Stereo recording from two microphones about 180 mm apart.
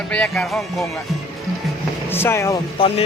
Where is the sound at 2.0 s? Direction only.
15° left (ahead or behind).